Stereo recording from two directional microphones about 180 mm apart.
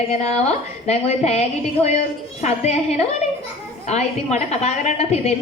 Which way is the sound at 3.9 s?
35° left (ahead or behind).